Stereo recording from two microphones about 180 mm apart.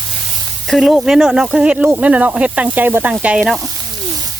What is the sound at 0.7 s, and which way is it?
Speech, centre (ahead or behind).